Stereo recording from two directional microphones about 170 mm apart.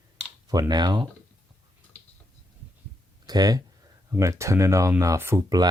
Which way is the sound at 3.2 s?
25° right (ahead or behind).